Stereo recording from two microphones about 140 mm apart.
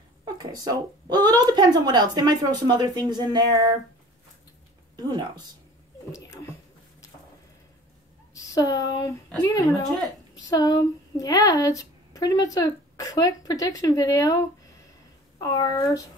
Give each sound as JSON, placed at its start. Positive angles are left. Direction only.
{"t": 0.2, "sound": "speech", "side_deg": -30}
{"t": 4.9, "sound": "speech", "side_deg": -30}
{"t": 6.1, "sound": "speech", "side_deg": 20}
{"t": 8.5, "sound": "a woman's voice", "side_deg": 25}
{"t": 15.4, "sound": "a woman's voice", "side_deg": 25}